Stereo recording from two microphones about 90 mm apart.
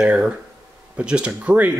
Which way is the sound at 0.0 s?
10° right (ahead or behind).